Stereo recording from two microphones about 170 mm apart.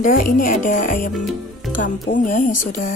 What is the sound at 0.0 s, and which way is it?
Speech, 55° left (ahead or behind).